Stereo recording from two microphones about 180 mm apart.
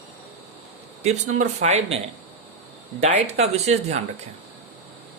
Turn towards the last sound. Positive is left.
turn(degrees=-35)  # may be behind; listen again after turning